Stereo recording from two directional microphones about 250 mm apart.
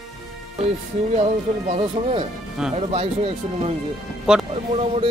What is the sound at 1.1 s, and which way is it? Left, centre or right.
Speech, right.